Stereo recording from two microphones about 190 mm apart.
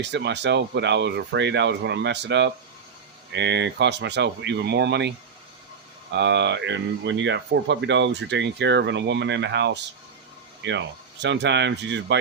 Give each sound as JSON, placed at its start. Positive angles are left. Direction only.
{"t": 0.0, "sound": "speech", "side_deg": -65}